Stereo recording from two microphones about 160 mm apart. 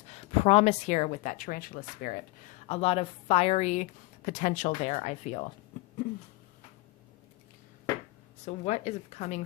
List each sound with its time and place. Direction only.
0.1 s speech: 40° left (ahead or behind); by 2.1 s 60° left (ahead or behind)
2.6 s a woman's voice: 40° left (ahead or behind)
8.4 s speech: 45° left (ahead or behind)